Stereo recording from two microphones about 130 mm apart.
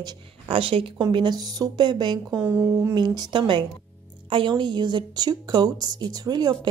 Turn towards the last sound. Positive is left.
turn(degrees=-30)  # may be behind; listen again after turning